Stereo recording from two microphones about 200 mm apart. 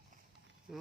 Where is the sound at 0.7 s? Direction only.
Centre (ahead or behind).